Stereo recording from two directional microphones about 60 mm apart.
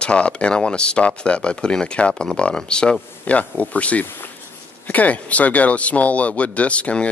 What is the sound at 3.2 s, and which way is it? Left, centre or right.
Speech, left.